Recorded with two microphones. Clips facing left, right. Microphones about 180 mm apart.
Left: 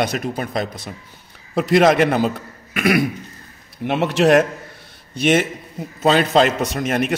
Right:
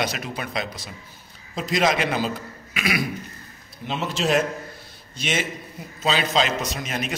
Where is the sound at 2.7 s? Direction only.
55° left (ahead or behind).